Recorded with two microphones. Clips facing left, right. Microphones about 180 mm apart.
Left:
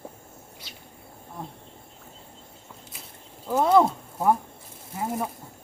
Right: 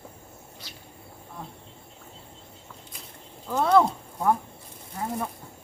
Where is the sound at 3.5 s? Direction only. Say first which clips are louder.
Left 1 dB; 15° left (ahead or behind).